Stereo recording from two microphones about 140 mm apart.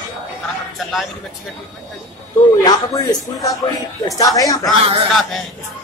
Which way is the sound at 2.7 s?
25° left (ahead or behind).